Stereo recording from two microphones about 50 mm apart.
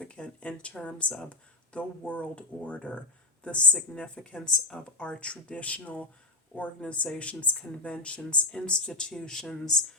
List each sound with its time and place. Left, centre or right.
0.0 s speech: left